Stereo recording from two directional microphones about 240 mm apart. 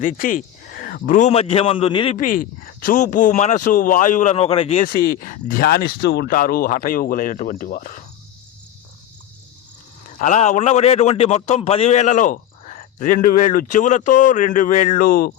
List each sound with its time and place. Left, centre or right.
0.0 s a man's voice: left
2.1 s a man's voice: left
4.9 s a man's voice: left
10.2 s a man's voice: left